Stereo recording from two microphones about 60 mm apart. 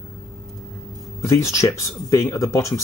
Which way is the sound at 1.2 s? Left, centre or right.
Left.